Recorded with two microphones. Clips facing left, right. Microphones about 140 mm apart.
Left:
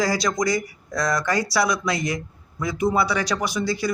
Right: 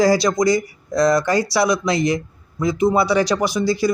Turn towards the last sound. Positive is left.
turn(degrees=-35)  # may be behind; listen again after turning